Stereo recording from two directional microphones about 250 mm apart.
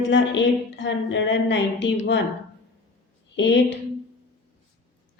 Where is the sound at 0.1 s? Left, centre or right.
Left.